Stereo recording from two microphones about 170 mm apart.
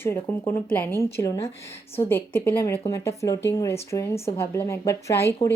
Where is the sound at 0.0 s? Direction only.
15° left (ahead or behind).